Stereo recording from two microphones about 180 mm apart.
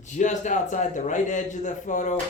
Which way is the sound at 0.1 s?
40° left (ahead or behind).